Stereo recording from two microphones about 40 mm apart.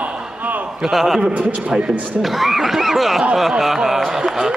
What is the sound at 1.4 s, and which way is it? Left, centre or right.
Speech, right.